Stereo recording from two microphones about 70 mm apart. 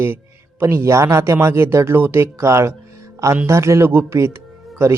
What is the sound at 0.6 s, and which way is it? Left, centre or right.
Speech, right.